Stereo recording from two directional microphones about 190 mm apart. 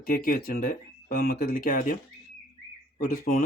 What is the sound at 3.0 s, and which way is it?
Speech, 45° left (ahead or behind).